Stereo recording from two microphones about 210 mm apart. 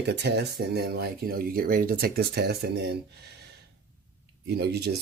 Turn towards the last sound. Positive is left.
turn(degrees=-50)  # may be behind; listen again after turning